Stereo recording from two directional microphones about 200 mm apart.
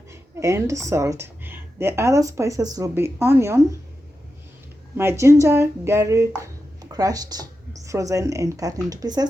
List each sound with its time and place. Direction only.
0.1 s speech: 15° right (ahead or behind)
4.9 s speech: 15° right (ahead or behind)